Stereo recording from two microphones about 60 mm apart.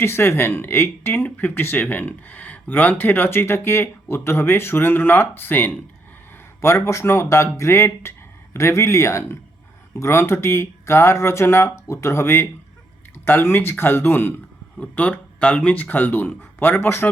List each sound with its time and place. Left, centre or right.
0.0 s speech: left
6.6 s speech: left
14.8 s speech: left